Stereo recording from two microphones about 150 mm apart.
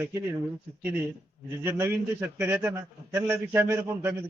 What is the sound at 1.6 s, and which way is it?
A man's voice, 15° right (ahead or behind).